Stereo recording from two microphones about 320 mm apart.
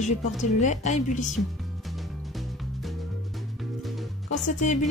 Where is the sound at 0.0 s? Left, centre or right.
Left.